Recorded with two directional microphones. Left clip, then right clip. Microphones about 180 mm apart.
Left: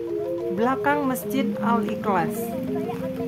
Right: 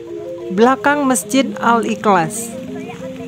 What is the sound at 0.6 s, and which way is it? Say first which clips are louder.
A woman's voice: right 10 dB; 50° right (ahead or behind).